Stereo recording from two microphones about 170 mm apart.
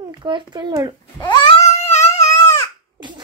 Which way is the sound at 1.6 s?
15° left (ahead or behind).